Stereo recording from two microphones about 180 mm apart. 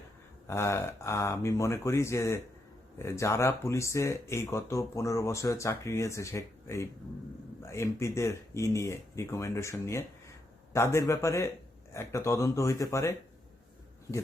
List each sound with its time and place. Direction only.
0.4 s speech: 15° left (ahead or behind)